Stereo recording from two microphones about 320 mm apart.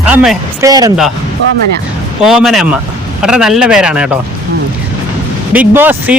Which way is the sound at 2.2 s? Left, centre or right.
Centre.